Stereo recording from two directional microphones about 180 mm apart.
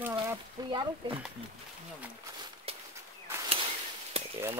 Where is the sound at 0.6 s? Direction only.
20° right (ahead or behind).